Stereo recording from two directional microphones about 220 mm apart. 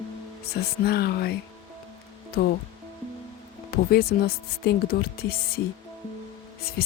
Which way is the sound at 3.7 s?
45° left (ahead or behind).